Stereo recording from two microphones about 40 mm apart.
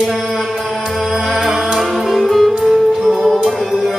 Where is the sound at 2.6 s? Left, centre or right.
Centre.